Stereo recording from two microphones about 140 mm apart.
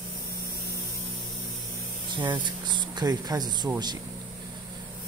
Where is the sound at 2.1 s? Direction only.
35° right (ahead or behind).